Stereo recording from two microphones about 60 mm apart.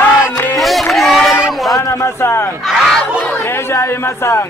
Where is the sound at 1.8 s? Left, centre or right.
Left.